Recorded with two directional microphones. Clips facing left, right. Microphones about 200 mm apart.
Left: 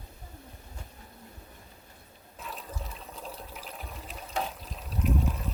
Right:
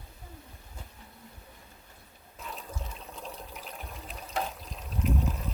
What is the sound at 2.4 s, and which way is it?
Water, centre (ahead or behind).